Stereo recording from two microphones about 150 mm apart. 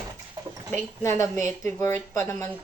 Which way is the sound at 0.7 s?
15° left (ahead or behind).